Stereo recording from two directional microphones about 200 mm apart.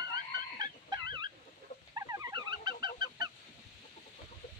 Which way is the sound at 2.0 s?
15° right (ahead or behind).